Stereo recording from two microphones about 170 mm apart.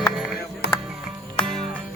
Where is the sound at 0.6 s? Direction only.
70° left (ahead or behind).